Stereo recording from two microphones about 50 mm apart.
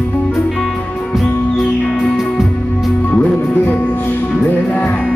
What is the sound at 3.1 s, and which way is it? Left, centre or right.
Music, left.